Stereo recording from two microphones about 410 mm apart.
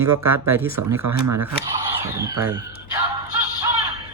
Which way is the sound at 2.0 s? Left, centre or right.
Centre.